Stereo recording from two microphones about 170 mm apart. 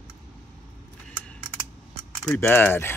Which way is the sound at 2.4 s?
10° left (ahead or behind).